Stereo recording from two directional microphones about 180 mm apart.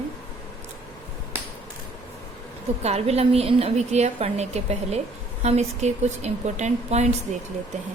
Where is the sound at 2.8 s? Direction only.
35° right (ahead or behind).